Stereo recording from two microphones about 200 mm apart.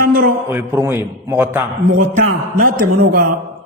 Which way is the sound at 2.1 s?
45° right (ahead or behind).